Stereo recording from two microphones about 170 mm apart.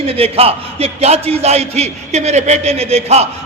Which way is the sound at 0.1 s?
35° right (ahead or behind).